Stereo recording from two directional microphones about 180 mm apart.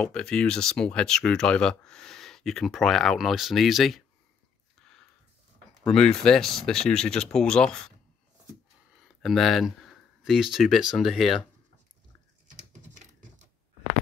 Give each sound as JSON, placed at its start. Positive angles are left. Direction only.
{"t": 0.0, "sound": "speech", "side_deg": 5}
{"t": 5.9, "sound": "speech", "side_deg": 5}
{"t": 9.2, "sound": "speech", "side_deg": 0}
{"t": 12.8, "sound": "a sound", "side_deg": -40}